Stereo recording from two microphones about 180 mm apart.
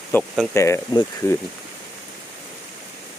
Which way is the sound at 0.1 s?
10° left (ahead or behind).